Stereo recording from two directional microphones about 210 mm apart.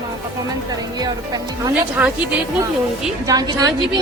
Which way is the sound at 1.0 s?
20° right (ahead or behind).